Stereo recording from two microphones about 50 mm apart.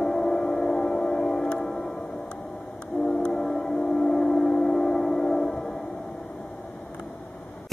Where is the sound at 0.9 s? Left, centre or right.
Centre.